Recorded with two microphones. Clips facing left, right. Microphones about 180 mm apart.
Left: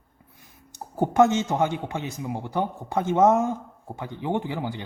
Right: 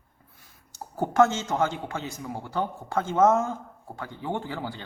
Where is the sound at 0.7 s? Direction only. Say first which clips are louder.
Left 3 dB; 15° left (ahead or behind).